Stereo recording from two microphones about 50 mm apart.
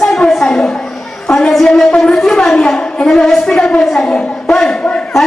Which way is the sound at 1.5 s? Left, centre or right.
Centre.